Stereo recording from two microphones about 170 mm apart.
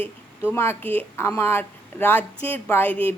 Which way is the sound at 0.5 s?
15° left (ahead or behind).